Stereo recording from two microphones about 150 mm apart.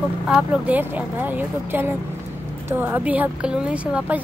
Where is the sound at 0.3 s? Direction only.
10° right (ahead or behind).